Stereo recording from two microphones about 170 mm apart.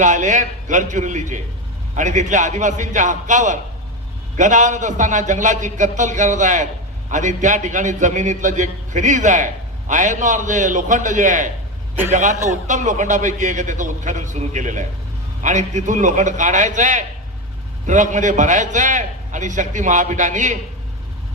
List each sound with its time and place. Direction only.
0.0 s a man's voice: 45° right (ahead or behind)